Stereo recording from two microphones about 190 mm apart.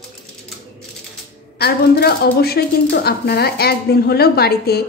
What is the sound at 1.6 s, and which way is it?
A woman's voice, 55° left (ahead or behind).